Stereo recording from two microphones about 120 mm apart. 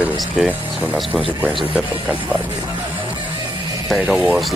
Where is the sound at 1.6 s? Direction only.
10° right (ahead or behind).